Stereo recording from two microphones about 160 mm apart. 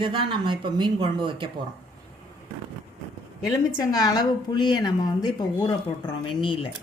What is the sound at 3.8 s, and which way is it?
A woman's voice, 25° left (ahead or behind).